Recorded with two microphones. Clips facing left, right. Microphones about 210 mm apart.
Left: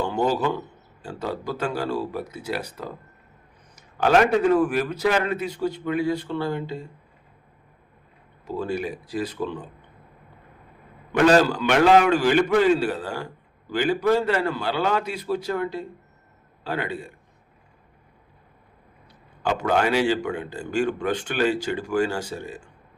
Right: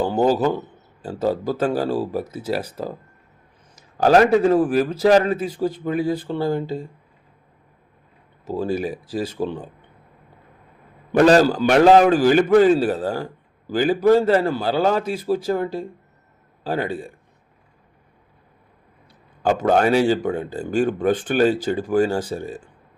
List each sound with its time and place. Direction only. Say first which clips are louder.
0.0 s a man's voice: right 5 dB; 35° right (ahead or behind)
3.9 s a man's voice: right 4 dB; 35° right (ahead or behind)
9.4 s a man's voice: right 6 dB; 35° right (ahead or behind)
11.1 s a man's voice: right 4 dB; 35° right (ahead or behind)
19.4 s speech: right 5 dB; 45° right (ahead or behind)